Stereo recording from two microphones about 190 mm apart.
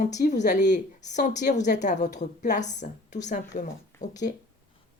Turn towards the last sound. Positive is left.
turn(degrees=40)  # may be behind; listen again after turning